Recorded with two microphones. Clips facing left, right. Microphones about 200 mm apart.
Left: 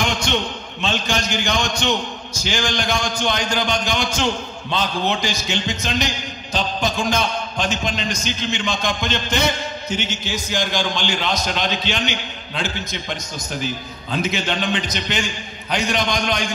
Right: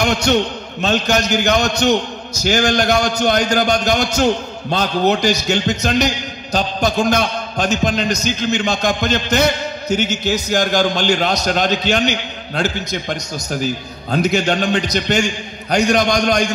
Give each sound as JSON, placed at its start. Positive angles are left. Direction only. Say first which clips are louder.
{"t": 0.0, "sound": "a man's voice", "louder": "right 6 dB", "side_deg": -40}
{"t": 14.3, "sound": "a man's voice", "louder": "right 6 dB", "side_deg": -45}